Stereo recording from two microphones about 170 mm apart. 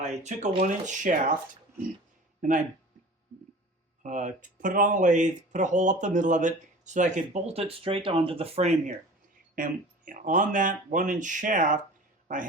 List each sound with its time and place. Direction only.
0.0 s speech: 45° right (ahead or behind)
4.0 s speech: 45° right (ahead or behind)
9.6 s speech: 55° right (ahead or behind)